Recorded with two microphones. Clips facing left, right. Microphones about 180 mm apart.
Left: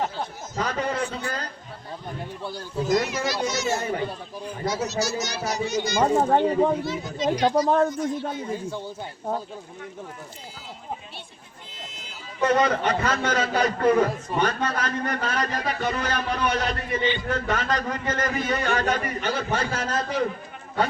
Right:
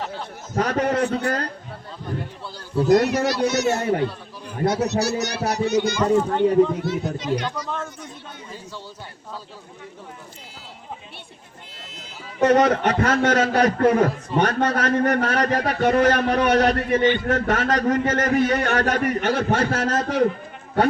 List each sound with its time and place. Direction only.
0.1 s a man's voice: 65° right (ahead or behind)
2.8 s a child's voice: 65° right (ahead or behind)
12.4 s a man's voice: 65° right (ahead or behind)